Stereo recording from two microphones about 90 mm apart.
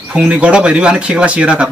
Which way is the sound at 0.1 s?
15° right (ahead or behind).